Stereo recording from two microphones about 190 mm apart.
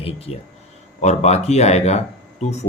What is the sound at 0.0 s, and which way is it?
Speech, 30° left (ahead or behind).